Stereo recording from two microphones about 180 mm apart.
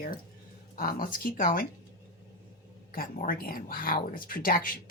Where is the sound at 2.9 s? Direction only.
50° left (ahead or behind).